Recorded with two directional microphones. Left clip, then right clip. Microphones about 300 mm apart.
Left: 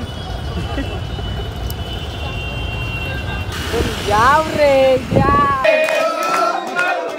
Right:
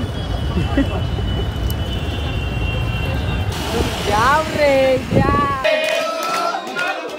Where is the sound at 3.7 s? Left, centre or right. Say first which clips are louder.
Left 2 dB; centre.